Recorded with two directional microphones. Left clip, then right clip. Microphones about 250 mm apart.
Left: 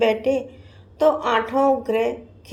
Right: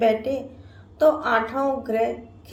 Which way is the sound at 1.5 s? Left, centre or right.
Left.